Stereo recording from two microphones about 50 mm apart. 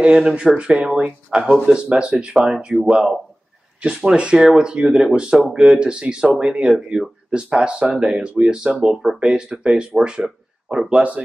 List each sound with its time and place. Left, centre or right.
0.0 s speech: centre
2.5 s speech: centre
11.0 s speech: right